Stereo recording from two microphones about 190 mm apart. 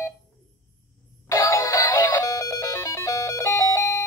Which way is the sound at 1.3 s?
15° left (ahead or behind).